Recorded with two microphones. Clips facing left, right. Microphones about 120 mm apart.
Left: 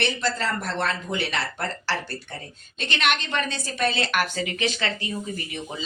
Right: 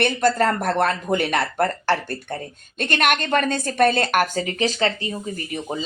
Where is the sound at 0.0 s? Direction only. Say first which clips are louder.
Right 7 dB; 50° right (ahead or behind).